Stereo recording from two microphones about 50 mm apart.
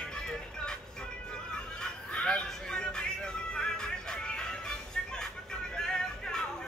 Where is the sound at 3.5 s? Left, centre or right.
Centre.